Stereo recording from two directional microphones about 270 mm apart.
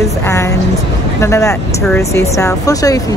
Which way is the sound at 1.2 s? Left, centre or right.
Centre.